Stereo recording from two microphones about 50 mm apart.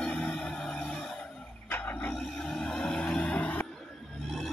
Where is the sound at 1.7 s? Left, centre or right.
Left.